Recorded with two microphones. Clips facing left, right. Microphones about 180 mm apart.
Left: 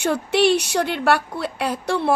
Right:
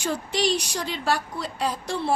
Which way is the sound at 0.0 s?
65° left (ahead or behind).